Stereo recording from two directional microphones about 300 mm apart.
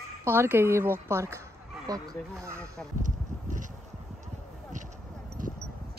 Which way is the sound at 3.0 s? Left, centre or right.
Right.